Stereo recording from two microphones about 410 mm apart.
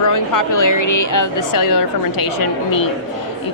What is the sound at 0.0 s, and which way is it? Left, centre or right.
Speech, left.